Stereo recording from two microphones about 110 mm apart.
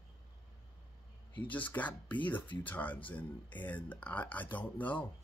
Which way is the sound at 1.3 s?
15° left (ahead or behind).